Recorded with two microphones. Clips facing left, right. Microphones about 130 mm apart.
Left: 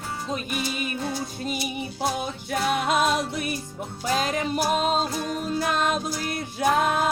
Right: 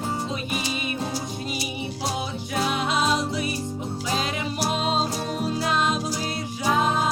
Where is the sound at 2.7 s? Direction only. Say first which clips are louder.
Left 2 dB; 50° left (ahead or behind).